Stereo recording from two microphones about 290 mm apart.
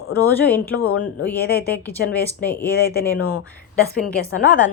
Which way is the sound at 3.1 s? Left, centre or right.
Left.